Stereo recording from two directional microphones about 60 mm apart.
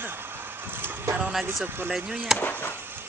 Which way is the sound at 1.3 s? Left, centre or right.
Centre.